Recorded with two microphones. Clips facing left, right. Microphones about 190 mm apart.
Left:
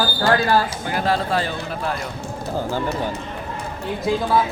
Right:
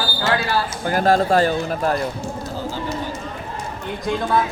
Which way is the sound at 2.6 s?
55° left (ahead or behind).